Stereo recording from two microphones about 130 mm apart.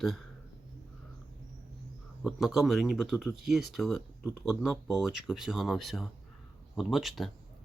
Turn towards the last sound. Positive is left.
turn(degrees=0)  # may be behind; listen again after turning